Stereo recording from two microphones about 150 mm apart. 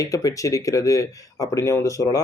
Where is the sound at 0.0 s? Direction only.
20° left (ahead or behind).